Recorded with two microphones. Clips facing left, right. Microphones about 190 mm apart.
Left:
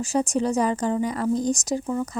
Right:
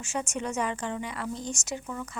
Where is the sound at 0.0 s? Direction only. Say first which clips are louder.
Left 10 dB; 35° left (ahead or behind).